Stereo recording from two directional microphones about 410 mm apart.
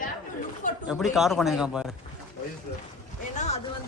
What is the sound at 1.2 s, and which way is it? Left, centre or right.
Speech, centre.